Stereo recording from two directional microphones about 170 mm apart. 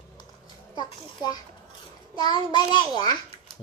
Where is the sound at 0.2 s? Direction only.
25° left (ahead or behind).